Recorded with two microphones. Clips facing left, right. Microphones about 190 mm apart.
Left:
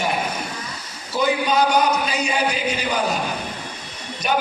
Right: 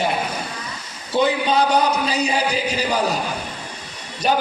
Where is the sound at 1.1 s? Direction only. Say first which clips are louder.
Right 1 dB; 30° right (ahead or behind).